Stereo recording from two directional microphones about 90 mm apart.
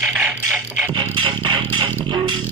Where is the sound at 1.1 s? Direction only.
75° right (ahead or behind).